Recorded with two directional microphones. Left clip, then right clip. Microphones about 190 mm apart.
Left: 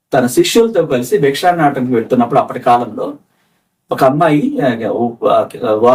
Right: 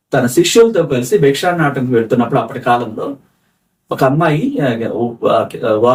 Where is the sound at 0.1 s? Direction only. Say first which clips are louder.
Left 1 dB; 5° left (ahead or behind).